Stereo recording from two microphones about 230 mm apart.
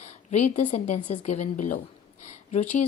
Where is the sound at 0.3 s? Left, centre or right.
Left.